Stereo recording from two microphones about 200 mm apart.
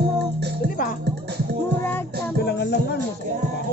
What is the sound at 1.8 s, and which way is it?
Music, 10° left (ahead or behind).